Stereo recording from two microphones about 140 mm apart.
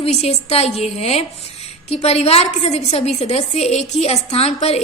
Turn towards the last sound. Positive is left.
turn(degrees=50)  # may be behind; listen again after turning